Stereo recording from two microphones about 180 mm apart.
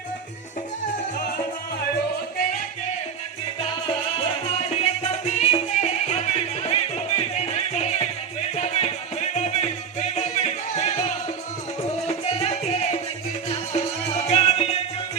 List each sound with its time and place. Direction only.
4.8 s music: 40° left (ahead or behind)